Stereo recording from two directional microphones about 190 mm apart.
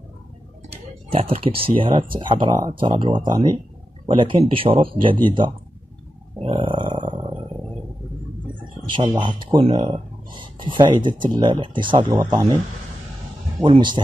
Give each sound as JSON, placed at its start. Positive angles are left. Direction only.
{"t": 1.1, "sound": "speech", "side_deg": -30}
{"t": 6.3, "sound": "grunt", "side_deg": -30}
{"t": 8.8, "sound": "speech", "side_deg": -25}
{"t": 13.6, "sound": "speech", "side_deg": -25}